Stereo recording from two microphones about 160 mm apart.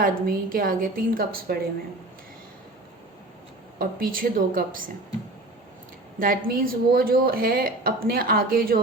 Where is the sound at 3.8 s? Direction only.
65° right (ahead or behind).